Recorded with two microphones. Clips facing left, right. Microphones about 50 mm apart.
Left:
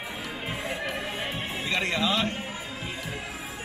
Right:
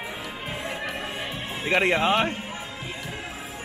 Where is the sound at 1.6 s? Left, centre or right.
Right.